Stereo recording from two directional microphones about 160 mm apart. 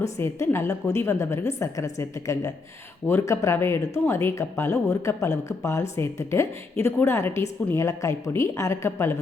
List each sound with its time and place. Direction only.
0.0 s a woman's voice: 15° left (ahead or behind)